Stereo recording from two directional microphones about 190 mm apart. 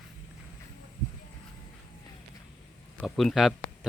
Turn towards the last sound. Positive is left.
turn(degrees=0)  # may be behind; listen again after turning